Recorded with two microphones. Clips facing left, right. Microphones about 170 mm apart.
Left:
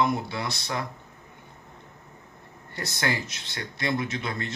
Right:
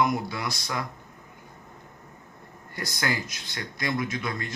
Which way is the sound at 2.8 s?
25° left (ahead or behind).